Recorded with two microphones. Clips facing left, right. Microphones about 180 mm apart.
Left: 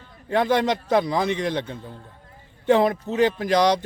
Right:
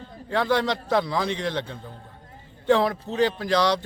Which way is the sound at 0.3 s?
20° left (ahead or behind).